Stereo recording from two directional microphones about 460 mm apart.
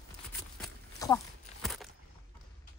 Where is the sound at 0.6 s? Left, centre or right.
Centre.